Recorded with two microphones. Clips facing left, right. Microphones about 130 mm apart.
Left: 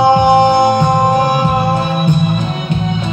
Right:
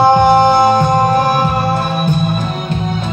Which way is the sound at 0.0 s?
50° right (ahead or behind).